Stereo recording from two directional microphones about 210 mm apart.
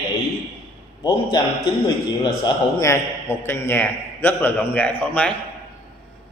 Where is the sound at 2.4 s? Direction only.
15° left (ahead or behind).